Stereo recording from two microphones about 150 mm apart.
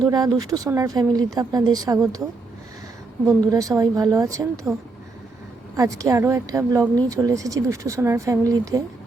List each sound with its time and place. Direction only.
0.0 s speech: 25° right (ahead or behind)
3.2 s speech: 25° right (ahead or behind)
5.7 s speech: 20° right (ahead or behind)